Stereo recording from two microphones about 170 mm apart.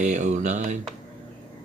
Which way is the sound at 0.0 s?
45° right (ahead or behind).